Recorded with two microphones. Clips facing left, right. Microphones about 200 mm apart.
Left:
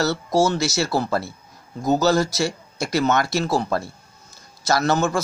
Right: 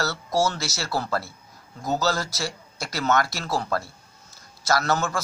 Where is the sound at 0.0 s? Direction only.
20° left (ahead or behind).